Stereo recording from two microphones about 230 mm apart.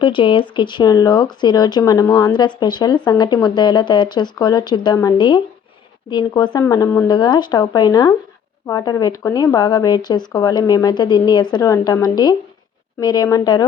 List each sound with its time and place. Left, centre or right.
0.0 s speech: left